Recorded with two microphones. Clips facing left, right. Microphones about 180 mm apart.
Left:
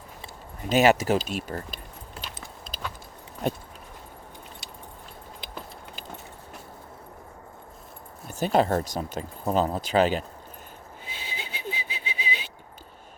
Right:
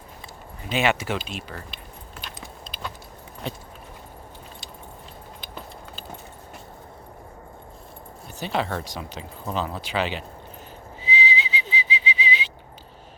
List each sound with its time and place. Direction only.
0.7 s speech: 40° left (ahead or behind)
3.4 s speech: 50° left (ahead or behind)
8.4 s speech: 45° left (ahead or behind)
11.0 s whistling: 55° left (ahead or behind)